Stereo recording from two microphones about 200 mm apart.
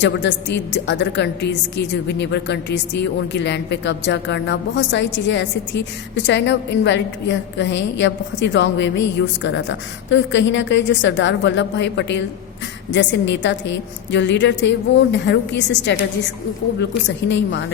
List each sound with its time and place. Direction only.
0.0 s a woman's voice: 60° left (ahead or behind)